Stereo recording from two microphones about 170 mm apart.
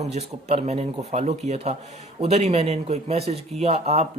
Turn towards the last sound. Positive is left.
turn(degrees=-40)  # may be behind; listen again after turning